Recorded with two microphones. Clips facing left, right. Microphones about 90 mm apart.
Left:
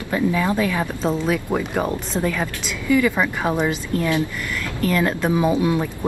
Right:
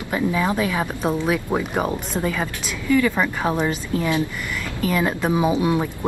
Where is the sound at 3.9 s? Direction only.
15° right (ahead or behind).